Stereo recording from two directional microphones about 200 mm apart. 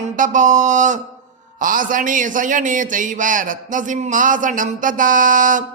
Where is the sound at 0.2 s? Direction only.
40° right (ahead or behind).